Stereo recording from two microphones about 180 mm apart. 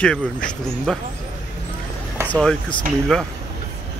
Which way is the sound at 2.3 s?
5° left (ahead or behind).